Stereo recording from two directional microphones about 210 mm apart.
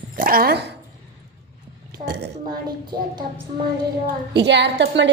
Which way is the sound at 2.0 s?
50° right (ahead or behind).